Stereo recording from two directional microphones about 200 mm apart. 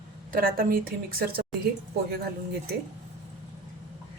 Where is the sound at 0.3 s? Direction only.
45° right (ahead or behind).